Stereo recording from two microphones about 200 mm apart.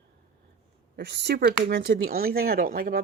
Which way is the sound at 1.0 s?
55° right (ahead or behind).